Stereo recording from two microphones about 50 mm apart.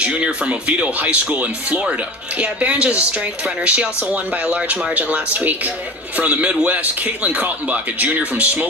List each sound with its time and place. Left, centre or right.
0.0 s speech: right